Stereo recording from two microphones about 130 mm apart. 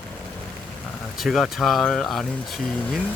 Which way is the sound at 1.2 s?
Centre (ahead or behind).